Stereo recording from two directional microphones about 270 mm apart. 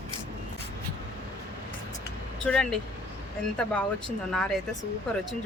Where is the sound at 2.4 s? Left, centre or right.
Centre.